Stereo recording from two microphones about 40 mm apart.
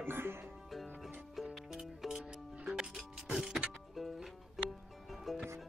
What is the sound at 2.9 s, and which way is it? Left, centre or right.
Music, centre.